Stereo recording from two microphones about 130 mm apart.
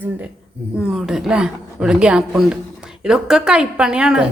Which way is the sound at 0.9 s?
5° right (ahead or behind).